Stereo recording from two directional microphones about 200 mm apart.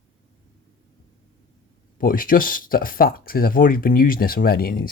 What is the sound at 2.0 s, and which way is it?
Speech, 45° left (ahead or behind).